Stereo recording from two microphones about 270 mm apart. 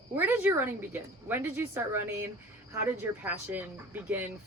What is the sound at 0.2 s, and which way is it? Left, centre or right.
Speech, centre.